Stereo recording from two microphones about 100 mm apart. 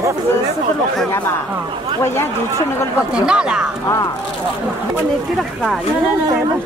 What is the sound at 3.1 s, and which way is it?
Speech, 10° right (ahead or behind).